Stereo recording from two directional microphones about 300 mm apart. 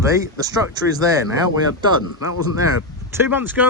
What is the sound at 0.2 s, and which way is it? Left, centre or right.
Speech, centre.